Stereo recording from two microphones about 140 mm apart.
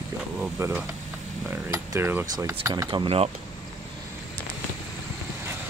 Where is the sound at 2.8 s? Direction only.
40° right (ahead or behind).